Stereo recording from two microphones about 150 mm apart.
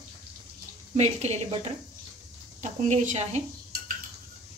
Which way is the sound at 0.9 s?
45° right (ahead or behind).